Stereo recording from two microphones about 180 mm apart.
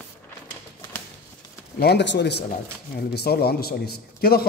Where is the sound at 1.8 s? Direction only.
70° left (ahead or behind).